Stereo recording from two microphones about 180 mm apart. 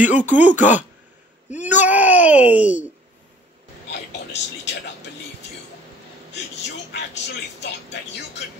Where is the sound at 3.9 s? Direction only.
75° left (ahead or behind).